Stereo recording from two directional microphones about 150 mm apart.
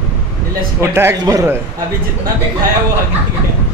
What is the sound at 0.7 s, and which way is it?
Speech, 20° right (ahead or behind).